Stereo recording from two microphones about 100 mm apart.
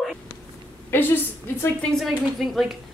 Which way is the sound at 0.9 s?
20° left (ahead or behind).